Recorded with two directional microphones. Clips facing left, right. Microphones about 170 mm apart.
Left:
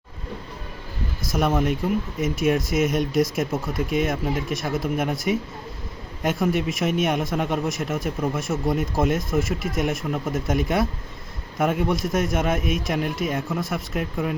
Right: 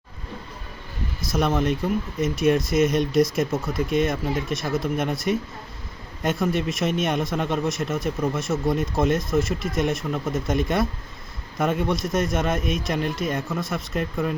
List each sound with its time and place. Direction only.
1.4 s speech: 10° left (ahead or behind)